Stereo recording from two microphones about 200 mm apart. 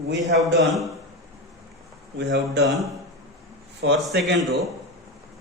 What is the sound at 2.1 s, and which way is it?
Speech, 60° right (ahead or behind).